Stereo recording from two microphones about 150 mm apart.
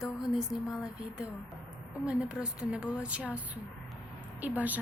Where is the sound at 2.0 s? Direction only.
5° right (ahead or behind).